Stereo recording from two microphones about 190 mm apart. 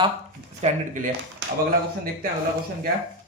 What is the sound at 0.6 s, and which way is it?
Speech, 40° right (ahead or behind).